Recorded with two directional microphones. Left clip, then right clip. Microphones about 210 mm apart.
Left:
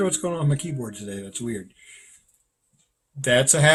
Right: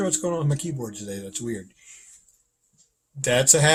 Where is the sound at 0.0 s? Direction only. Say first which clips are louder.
Left 1 dB; 10° right (ahead or behind).